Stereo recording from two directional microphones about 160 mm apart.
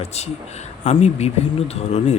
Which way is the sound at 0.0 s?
40° left (ahead or behind).